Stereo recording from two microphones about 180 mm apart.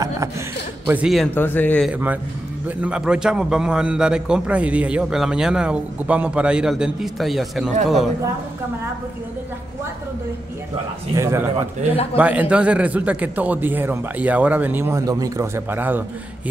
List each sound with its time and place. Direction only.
0.8 s a man's voice: 5° right (ahead or behind)
1.3 s speech: 10° left (ahead or behind)
1.9 s a man's voice: 10° right (ahead or behind)
11.1 s a man's voice: 15° right (ahead or behind)